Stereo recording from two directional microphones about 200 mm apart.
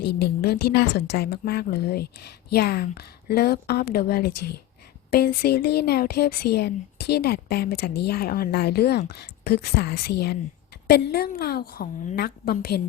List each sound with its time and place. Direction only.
0.0 s a woman's voice: 55° left (ahead or behind)